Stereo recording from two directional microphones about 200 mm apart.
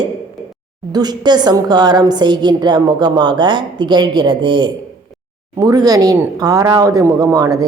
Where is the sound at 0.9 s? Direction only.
20° right (ahead or behind).